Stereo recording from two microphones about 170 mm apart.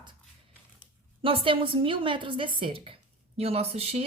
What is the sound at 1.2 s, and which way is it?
Speech, 30° right (ahead or behind).